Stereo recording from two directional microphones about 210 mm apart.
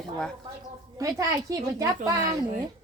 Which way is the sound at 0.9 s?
15° right (ahead or behind).